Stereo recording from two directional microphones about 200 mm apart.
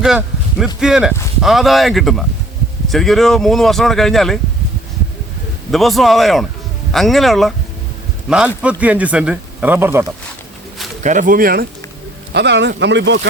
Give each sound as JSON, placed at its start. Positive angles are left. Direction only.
{"t": 0.0, "sound": "speech", "side_deg": 0}
{"t": 5.7, "sound": "speech", "side_deg": 0}
{"t": 8.6, "sound": "speech", "side_deg": -5}
{"t": 11.0, "sound": "speech", "side_deg": -40}
{"t": 12.3, "sound": "speech", "side_deg": -60}